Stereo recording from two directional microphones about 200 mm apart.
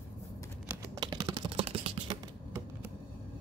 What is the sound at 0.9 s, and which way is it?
Computer keyboard, 20° right (ahead or behind).